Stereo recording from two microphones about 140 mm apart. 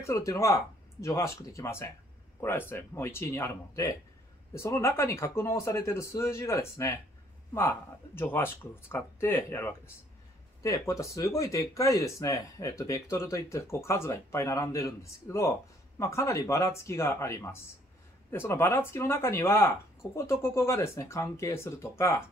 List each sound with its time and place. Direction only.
0.0 s speech: 20° left (ahead or behind)